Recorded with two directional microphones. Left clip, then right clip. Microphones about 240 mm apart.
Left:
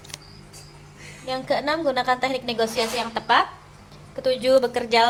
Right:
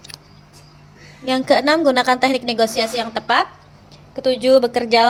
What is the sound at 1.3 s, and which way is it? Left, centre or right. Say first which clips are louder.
A woman's voice: right 8 dB; right.